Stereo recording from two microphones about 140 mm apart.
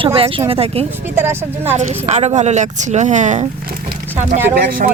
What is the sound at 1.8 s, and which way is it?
Speech, 55° right (ahead or behind).